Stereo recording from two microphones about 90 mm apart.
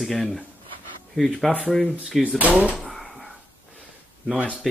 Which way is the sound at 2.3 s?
15° right (ahead or behind).